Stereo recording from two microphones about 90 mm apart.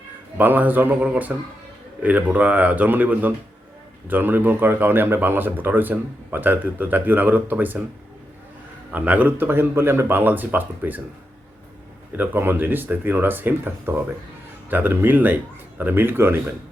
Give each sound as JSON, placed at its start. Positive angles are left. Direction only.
{"t": 0.3, "sound": "speech", "side_deg": -20}
{"t": 8.9, "sound": "speech", "side_deg": -15}
{"t": 12.1, "sound": "speech", "side_deg": -20}